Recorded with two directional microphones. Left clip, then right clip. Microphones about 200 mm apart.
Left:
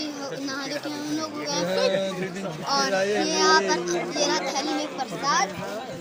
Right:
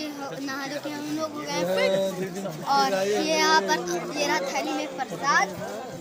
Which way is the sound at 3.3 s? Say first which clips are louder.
Left 1 dB; 50° right (ahead or behind).